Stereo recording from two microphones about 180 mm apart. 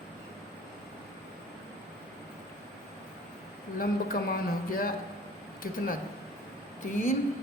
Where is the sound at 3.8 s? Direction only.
55° left (ahead or behind).